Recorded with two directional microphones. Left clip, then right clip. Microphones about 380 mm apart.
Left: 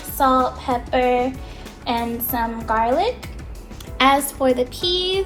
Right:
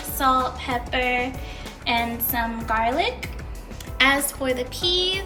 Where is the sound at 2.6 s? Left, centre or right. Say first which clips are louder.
Left 4 dB; centre.